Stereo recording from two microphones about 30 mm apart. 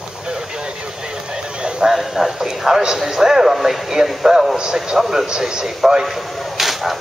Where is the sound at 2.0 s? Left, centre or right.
Centre.